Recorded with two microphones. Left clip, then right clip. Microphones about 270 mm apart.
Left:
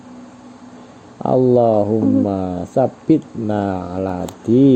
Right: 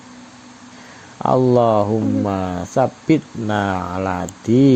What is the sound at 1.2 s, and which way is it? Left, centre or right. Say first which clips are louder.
Speech: left 1 dB; right.